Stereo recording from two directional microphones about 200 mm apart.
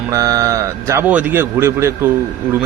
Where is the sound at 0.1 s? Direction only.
15° right (ahead or behind).